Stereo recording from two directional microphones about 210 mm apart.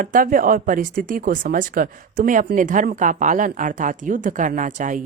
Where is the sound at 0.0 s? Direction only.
40° right (ahead or behind).